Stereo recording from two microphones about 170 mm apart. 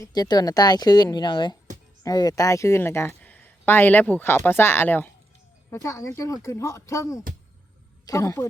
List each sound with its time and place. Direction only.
0.0 s a woman's voice: 25° left (ahead or behind)